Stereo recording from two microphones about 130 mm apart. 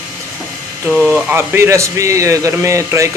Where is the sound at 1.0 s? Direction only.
15° right (ahead or behind).